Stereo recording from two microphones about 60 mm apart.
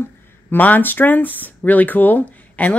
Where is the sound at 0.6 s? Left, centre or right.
Left.